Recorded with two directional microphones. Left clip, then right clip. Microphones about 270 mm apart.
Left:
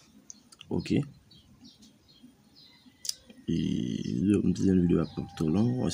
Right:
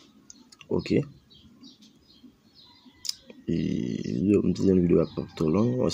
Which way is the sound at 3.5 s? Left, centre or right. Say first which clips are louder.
Right 2 dB; right.